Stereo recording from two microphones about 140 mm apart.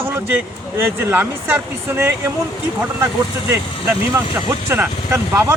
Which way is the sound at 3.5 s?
20° right (ahead or behind).